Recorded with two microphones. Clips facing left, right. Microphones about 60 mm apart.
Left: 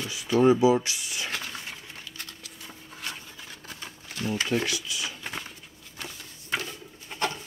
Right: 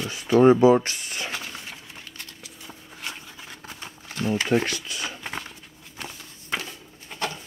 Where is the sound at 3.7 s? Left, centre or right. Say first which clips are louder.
Right 2 dB; right.